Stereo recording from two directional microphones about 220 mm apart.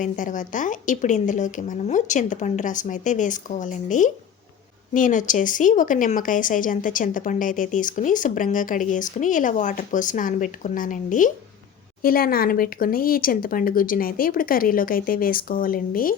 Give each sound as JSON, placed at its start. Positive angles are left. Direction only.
{"t": 0.0, "sound": "speech", "side_deg": 35}